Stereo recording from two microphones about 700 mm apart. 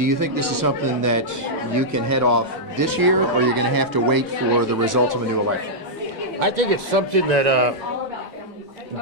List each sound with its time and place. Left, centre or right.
0.0 s speech: right
6.4 s a man's voice: right